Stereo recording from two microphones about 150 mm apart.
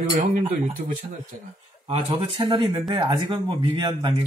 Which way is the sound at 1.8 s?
40° right (ahead or behind).